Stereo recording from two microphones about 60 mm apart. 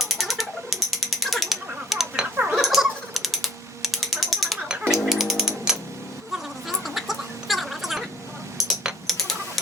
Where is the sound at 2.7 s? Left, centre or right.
Centre.